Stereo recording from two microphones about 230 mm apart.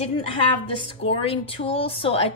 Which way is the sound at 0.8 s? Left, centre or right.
Left.